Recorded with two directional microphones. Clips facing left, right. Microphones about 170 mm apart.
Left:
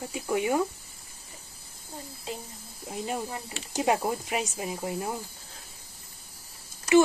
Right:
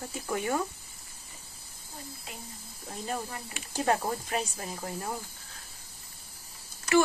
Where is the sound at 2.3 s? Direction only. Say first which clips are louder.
Left 12 dB; 30° left (ahead or behind).